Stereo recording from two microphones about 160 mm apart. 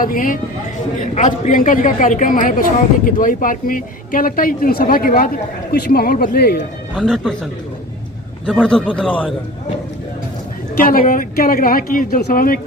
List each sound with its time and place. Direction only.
0.0 s a woman's voice: 60° left (ahead or behind); by 6.6 s 75° left (ahead or behind)
6.9 s speech: 5° left (ahead or behind)
8.4 s speech: 5° left (ahead or behind)
10.8 s a woman's voice: 60° left (ahead or behind)